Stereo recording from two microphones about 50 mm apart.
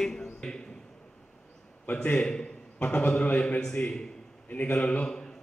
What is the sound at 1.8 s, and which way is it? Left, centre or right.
Speech, left.